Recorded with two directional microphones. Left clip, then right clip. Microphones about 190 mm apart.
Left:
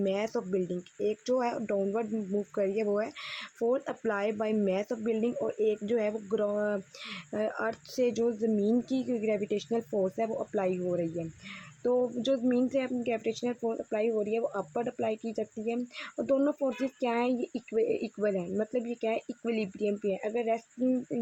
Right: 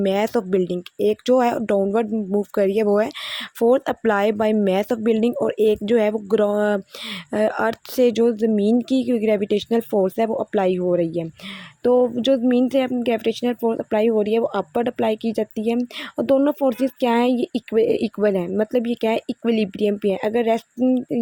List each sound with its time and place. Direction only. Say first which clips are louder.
0.0 s a woman's voice: right 11 dB; 40° right (ahead or behind)